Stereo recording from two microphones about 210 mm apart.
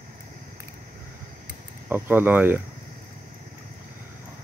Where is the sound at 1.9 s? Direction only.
10° right (ahead or behind).